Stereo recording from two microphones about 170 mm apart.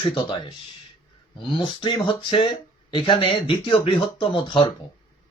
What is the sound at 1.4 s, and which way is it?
Speech, 30° left (ahead or behind).